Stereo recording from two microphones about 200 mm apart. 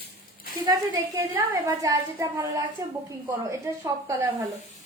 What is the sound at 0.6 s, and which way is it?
A woman's voice, 15° right (ahead or behind).